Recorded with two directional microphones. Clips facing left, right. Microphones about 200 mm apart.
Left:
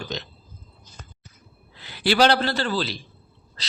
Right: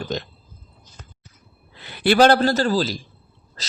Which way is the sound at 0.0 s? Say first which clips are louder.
Right 5 dB; 50° right (ahead or behind).